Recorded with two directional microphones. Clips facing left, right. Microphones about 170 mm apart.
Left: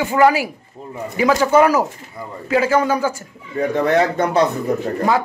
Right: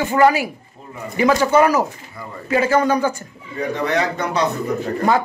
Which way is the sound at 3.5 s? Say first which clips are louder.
Left 4 dB; 50° left (ahead or behind).